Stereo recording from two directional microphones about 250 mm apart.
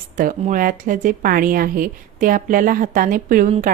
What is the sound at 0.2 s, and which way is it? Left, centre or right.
Speech, right.